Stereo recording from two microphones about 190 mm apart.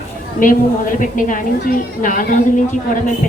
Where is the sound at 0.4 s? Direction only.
45° left (ahead or behind).